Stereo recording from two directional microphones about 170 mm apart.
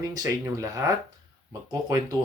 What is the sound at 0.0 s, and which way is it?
Speech, 20° right (ahead or behind).